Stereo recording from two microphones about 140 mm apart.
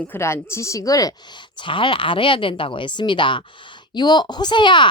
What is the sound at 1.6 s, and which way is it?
A woman's voice, 35° left (ahead or behind).